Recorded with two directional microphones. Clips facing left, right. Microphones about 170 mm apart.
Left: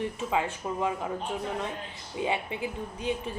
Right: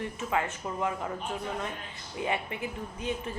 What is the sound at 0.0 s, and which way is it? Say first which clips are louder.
A woman's voice: left 2 dB; 15° left (ahead or behind).